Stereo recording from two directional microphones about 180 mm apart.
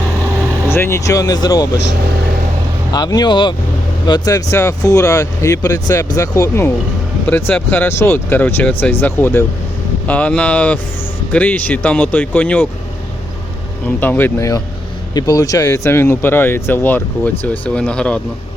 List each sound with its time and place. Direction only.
0.7 s speech: 15° left (ahead or behind)
2.9 s speech: 20° left (ahead or behind)
13.8 s speech: 10° left (ahead or behind)